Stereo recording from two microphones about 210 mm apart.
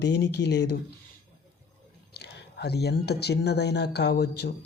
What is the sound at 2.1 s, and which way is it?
Speech, 50° left (ahead or behind).